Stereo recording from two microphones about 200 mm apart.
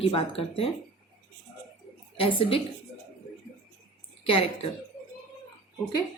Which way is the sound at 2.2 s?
25° left (ahead or behind).